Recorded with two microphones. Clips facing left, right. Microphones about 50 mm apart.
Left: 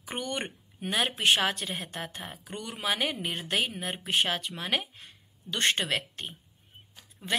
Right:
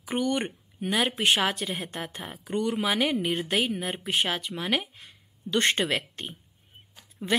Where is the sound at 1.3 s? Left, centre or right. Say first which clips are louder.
Right 1 dB; centre.